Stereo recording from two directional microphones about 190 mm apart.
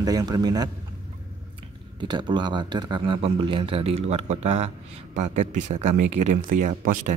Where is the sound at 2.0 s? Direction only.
25° right (ahead or behind).